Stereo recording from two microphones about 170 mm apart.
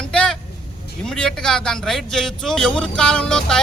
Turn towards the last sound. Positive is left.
turn(degrees=5)  # may be behind; listen again after turning